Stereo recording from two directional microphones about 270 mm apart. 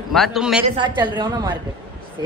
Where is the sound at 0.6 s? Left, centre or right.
Centre.